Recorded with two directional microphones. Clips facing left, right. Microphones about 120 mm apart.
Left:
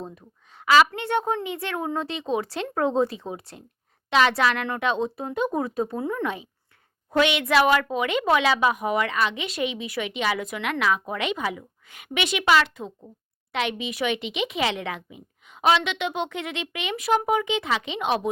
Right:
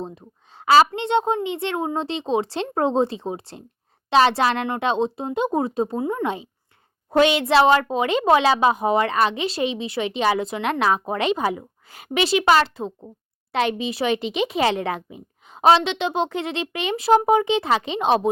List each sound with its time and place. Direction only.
0.0 s a woman's voice: 30° right (ahead or behind)
6.0 s a woman's voice: 15° right (ahead or behind)
6.2 s a woman's voice: 30° right (ahead or behind)